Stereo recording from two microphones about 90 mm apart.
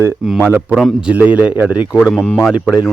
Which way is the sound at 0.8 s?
10° right (ahead or behind).